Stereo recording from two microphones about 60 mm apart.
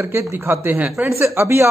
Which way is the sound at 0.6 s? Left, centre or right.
Right.